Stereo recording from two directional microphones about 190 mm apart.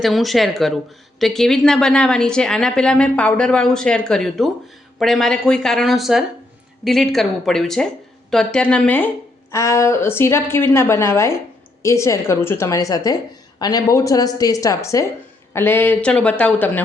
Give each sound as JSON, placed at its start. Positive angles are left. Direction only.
{"t": 0.0, "sound": "a woman's voice", "side_deg": 0}